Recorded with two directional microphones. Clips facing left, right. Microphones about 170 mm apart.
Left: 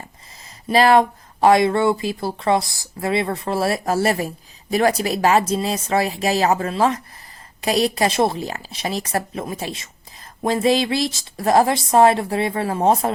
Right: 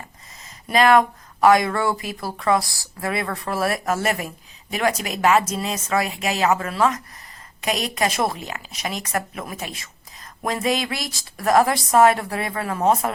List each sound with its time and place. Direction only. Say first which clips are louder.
0.7 s a woman's voice: left 2 dB; 30° left (ahead or behind)